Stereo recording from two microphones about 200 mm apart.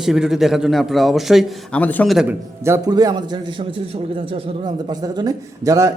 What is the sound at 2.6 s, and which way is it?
A man's voice, 15° right (ahead or behind).